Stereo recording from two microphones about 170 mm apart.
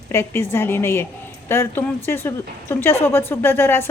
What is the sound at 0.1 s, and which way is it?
A woman's voice, 15° left (ahead or behind).